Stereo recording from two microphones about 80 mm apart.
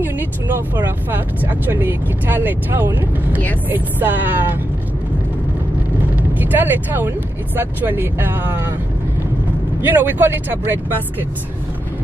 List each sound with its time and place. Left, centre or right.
0.7 s speech: right
6.1 s speech: right
9.8 s speech: right